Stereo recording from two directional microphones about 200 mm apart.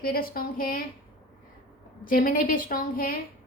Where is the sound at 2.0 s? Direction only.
45° left (ahead or behind).